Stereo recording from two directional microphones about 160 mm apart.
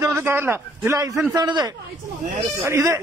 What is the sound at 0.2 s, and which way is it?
A man's voice, 15° right (ahead or behind).